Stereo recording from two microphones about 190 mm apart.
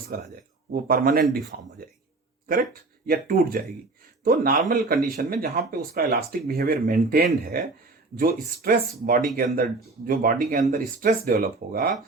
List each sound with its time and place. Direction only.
0.1 s speech: 50° right (ahead or behind)
3.1 s speech: 50° right (ahead or behind)